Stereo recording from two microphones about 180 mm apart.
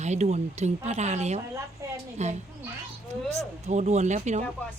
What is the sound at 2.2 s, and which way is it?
A woman's voice, 40° right (ahead or behind).